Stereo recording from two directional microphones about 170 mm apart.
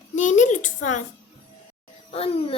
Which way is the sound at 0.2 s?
45° left (ahead or behind).